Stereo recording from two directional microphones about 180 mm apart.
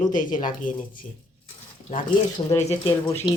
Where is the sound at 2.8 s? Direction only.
15° left (ahead or behind).